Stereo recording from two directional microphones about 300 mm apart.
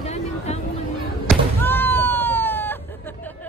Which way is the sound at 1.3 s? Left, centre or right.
Centre.